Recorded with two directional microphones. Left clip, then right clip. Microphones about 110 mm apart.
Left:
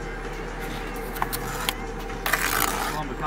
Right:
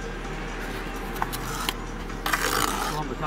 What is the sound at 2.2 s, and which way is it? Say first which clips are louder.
Mechanisms: left 1 dB; 5° left (ahead or behind).